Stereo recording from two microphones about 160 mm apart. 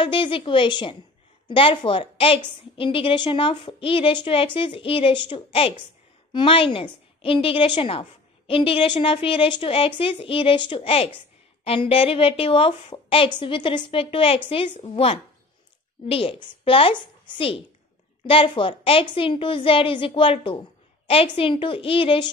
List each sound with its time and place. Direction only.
0.0 s a woman's voice: 30° left (ahead or behind)